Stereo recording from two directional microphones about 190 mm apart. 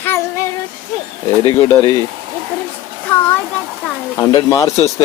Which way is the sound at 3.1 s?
10° left (ahead or behind).